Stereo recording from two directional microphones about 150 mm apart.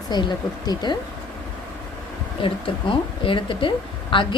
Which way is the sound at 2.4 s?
35° left (ahead or behind).